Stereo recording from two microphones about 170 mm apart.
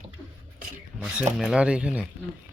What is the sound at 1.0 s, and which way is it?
Speech, 5° right (ahead or behind).